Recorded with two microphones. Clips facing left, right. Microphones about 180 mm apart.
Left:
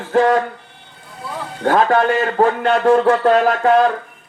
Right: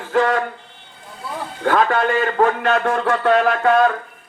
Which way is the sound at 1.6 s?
40° left (ahead or behind).